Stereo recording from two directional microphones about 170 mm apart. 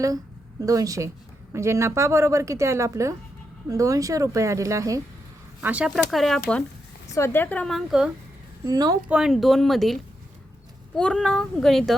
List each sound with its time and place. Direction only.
0.6 s a woman's voice: 20° right (ahead or behind)
5.6 s a child's voice: 5° right (ahead or behind)
7.1 s a woman's voice: 15° left (ahead or behind); by 8.1 s 5° right (ahead or behind)
8.6 s speech: 20° right (ahead or behind)
9.0 s a child's voice: 5° right (ahead or behind)